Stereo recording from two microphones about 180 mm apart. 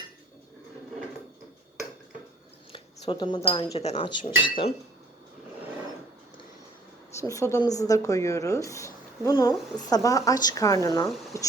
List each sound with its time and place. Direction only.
2.7 s speech: 25° left (ahead or behind)
7.2 s speech: 15° left (ahead or behind)